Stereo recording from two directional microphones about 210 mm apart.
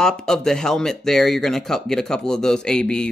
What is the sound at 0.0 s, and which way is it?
A man's voice, 5° left (ahead or behind).